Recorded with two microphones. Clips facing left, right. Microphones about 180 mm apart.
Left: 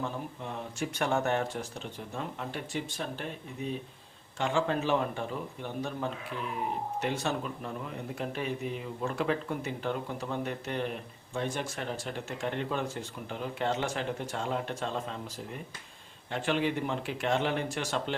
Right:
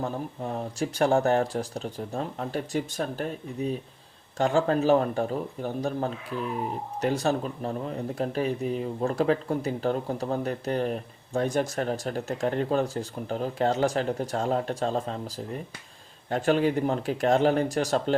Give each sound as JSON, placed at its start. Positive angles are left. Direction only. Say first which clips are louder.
{"t": 0.0, "sound": "speech", "louder": "right 5 dB", "side_deg": -40}
{"t": 16.3, "sound": "speech", "louder": "right 7 dB", "side_deg": -40}